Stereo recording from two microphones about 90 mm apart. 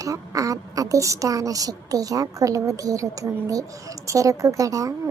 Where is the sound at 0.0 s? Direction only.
40° right (ahead or behind).